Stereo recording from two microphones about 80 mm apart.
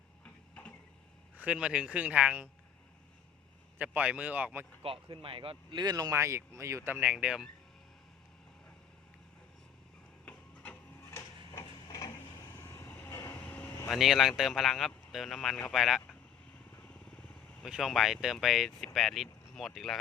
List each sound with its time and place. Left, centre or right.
1.4 s speech: centre
3.8 s speech: centre
5.0 s speech: right
6.1 s speech: right
6.9 s speech: centre
10.2 s printer: centre
11.1 s printer: left
12.1 s vehicle: left
13.9 s speech: centre
16.7 s vehicle: centre
17.6 s speech: centre